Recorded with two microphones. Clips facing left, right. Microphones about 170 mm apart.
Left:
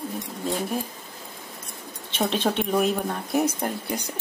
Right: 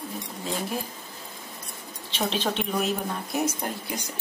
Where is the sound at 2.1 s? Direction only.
50° left (ahead or behind).